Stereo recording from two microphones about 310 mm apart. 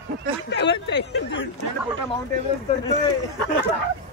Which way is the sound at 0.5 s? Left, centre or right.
Left.